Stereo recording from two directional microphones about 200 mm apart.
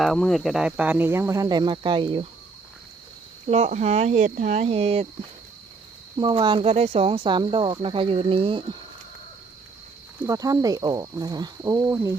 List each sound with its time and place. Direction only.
0.0 s speech: centre (ahead or behind); by 2.2 s 25° right (ahead or behind)
3.4 s speech: 30° right (ahead or behind)
6.1 s speech: 25° right (ahead or behind)
10.2 s speech: 15° right (ahead or behind)